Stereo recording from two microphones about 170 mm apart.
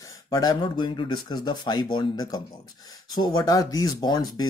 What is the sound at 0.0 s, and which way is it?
Speech, 20° left (ahead or behind).